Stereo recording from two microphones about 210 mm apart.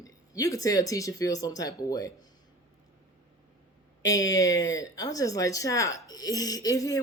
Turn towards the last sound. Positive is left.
turn(degrees=15)  # may be behind; listen again after turning